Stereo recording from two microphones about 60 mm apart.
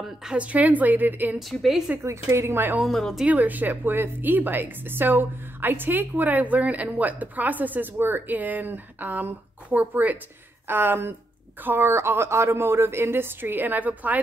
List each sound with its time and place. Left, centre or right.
0.2 s a woman's voice: centre
1.4 s a woman's voice: centre
2.0 s speech: right
2.9 s a woman's voice: centre
3.3 s a woman's voice: right
10.7 s a woman's voice: right